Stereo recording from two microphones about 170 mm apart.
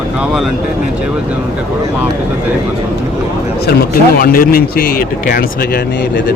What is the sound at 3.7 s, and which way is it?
Speech, 60° left (ahead or behind).